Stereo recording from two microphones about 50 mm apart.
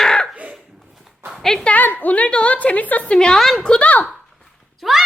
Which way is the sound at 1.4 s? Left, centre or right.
Centre.